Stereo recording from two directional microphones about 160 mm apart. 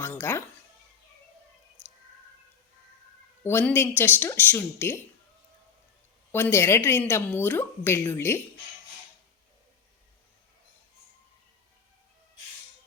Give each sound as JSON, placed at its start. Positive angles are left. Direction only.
{"t": 0.0, "sound": "a sound", "side_deg": 15}
{"t": 3.4, "sound": "a woman's voice", "side_deg": 10}
{"t": 6.3, "sound": "a woman's voice", "side_deg": 15}